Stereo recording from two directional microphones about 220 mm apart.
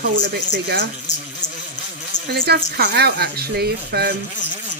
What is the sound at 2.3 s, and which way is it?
Speech, 45° right (ahead or behind).